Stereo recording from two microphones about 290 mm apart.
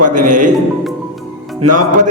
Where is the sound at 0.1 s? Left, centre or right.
Right.